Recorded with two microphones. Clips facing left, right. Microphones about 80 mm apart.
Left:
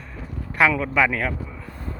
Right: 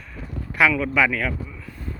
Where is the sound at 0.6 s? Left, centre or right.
Left.